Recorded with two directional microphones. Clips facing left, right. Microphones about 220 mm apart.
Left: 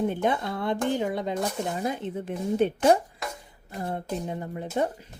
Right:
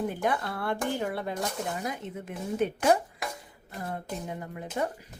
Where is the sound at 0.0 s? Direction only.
25° left (ahead or behind).